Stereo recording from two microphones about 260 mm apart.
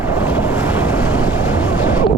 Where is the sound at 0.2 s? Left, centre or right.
Centre.